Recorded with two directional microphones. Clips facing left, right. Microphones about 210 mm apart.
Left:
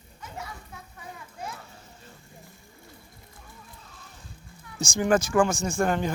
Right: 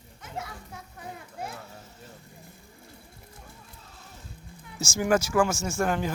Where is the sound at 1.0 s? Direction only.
55° right (ahead or behind).